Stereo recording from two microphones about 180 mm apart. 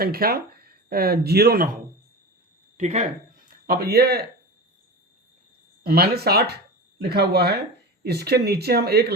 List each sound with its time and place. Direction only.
0.0 s speech: 55° right (ahead or behind)
2.7 s speech: 40° right (ahead or behind)
3.7 s speech: 60° right (ahead or behind)
5.8 s speech: 60° right (ahead or behind)